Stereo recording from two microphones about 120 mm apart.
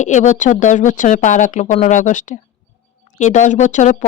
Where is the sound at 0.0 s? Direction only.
90° left.